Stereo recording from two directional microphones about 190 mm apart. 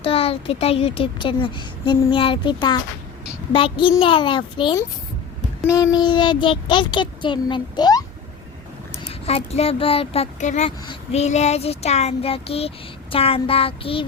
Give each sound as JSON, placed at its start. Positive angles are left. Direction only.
{"t": 0.0, "sound": "a child's voice", "side_deg": 30}
{"t": 9.2, "sound": "child singing", "side_deg": 30}